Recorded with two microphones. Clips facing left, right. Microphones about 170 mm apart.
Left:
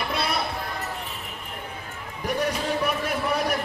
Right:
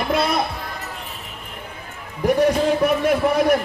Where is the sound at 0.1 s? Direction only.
45° right (ahead or behind).